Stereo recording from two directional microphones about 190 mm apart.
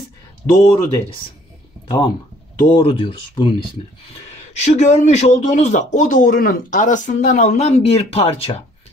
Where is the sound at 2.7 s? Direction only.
30° left (ahead or behind).